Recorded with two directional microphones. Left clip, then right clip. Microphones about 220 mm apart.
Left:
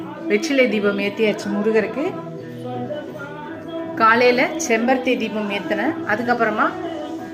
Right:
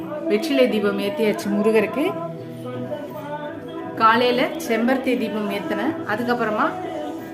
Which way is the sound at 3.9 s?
10° left (ahead or behind).